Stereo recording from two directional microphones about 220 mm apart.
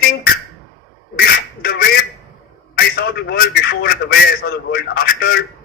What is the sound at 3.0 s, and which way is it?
A man's voice, 45° left (ahead or behind).